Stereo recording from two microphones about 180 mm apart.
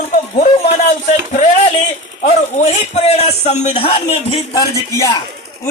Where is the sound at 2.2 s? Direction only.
40° left (ahead or behind).